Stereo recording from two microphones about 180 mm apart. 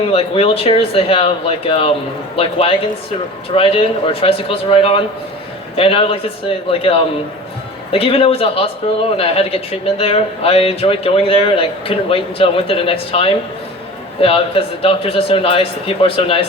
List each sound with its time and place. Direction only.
0.1 s a man's voice: 35° left (ahead or behind)